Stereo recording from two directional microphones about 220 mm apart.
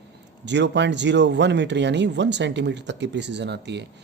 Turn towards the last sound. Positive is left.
turn(degrees=-50)  # may be behind; listen again after turning